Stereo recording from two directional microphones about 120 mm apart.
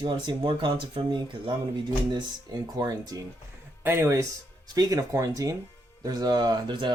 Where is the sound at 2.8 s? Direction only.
30° right (ahead or behind).